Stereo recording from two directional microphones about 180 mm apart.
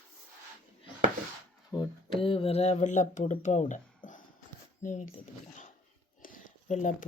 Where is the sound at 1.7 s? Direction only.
25° left (ahead or behind); by 5.0 s 45° left (ahead or behind).